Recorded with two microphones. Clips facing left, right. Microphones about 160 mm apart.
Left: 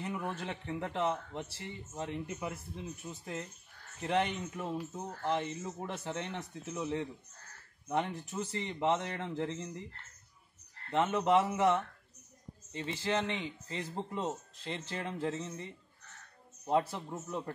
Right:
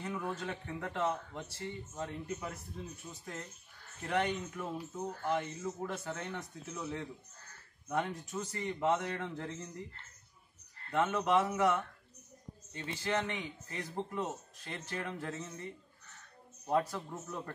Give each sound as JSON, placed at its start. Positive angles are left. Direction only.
{"t": 0.0, "sound": "a man's voice", "side_deg": 20}
{"t": 10.9, "sound": "a man's voice", "side_deg": 20}
{"t": 12.8, "sound": "a man's voice", "side_deg": 20}